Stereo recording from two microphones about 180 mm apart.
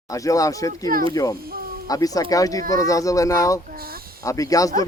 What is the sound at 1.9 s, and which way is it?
Speech, 20° left (ahead or behind).